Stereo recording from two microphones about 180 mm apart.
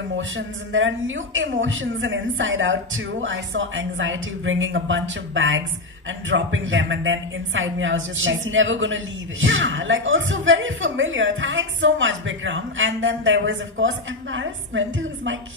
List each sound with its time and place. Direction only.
0.7 s speech: 90° right